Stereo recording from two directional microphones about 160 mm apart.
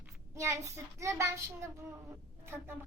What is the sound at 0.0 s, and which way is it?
A child's voice, 20° right (ahead or behind).